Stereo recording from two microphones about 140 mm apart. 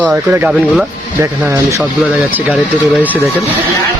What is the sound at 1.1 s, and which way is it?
Speech, 20° right (ahead or behind).